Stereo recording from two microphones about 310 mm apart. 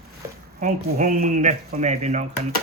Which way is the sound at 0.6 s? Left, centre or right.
Right.